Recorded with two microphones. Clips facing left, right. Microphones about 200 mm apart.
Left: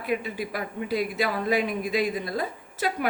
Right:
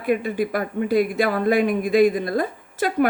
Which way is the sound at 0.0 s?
50° right (ahead or behind).